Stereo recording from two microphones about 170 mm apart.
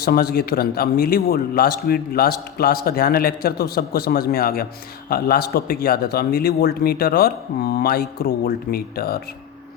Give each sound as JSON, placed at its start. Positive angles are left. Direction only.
{"t": 0.0, "sound": "a man's voice", "side_deg": 65}